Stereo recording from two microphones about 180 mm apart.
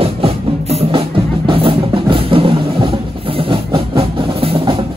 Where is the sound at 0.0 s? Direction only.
35° right (ahead or behind).